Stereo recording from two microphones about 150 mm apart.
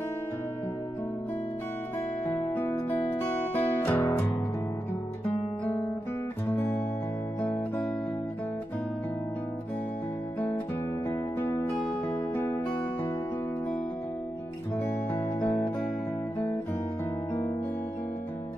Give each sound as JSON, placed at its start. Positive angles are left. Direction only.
{"t": 2.5, "sound": "guitar", "side_deg": 15}
{"t": 6.4, "sound": "guitar", "side_deg": 15}
{"t": 11.1, "sound": "music", "side_deg": 15}